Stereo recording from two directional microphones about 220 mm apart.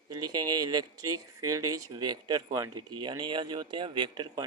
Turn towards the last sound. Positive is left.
turn(degrees=-20)  # may be behind; listen again after turning